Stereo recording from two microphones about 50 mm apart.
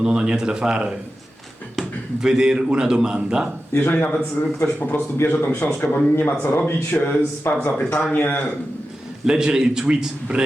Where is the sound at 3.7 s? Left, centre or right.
Left.